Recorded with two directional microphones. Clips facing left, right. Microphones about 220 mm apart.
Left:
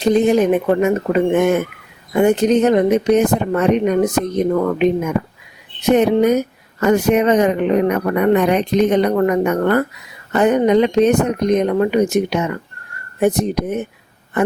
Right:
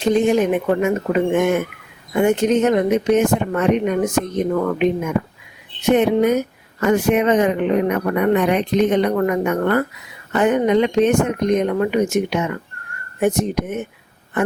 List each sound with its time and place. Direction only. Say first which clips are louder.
0.0 s a woman's voice: left 2 dB; 35° left (ahead or behind)
5.9 s a woman's voice: left 2 dB; 40° left (ahead or behind)